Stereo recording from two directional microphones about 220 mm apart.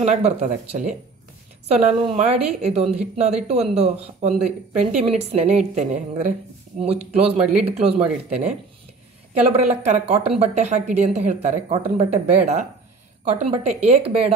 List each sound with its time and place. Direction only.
0.0 s speech: 30° right (ahead or behind)